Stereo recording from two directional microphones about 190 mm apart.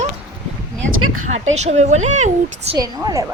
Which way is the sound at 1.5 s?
35° right (ahead or behind).